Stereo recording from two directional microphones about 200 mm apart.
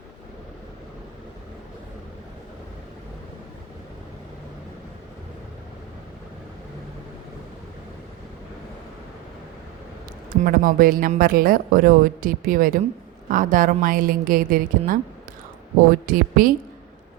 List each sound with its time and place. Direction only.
10.4 s a woman's voice: 45° right (ahead or behind)